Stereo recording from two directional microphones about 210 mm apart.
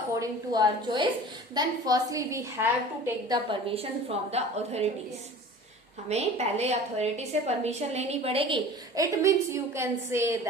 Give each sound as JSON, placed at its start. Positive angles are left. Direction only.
{"t": 0.2, "sound": "a woman's voice", "side_deg": -20}
{"t": 6.1, "sound": "a woman's voice", "side_deg": -30}